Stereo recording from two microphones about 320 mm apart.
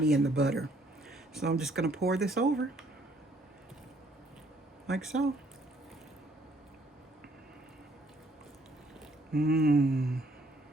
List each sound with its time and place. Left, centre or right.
0.0 s speech: centre
4.9 s speech: centre
9.3 s speech: centre
9.6 s a sound: right
9.8 s speech: centre